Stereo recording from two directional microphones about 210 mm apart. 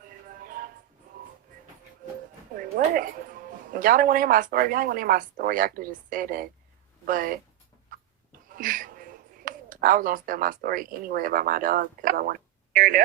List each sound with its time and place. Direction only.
0.3 s music: 45° right (ahead or behind)
2.6 s speech: 45° right (ahead or behind)
7.9 s a sound: 40° right (ahead or behind)
8.4 s speech: 40° right (ahead or behind)